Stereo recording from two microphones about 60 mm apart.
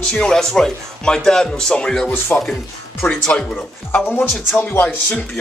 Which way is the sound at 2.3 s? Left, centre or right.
Left.